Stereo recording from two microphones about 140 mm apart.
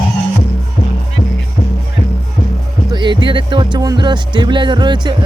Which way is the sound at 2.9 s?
35° right (ahead or behind).